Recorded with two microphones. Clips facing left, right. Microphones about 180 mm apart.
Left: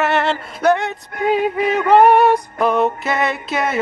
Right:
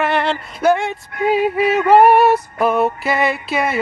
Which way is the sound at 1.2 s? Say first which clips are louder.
Right 1 dB; 5° right (ahead or behind).